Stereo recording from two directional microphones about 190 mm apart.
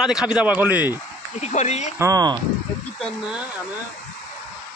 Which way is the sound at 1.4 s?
35° left (ahead or behind).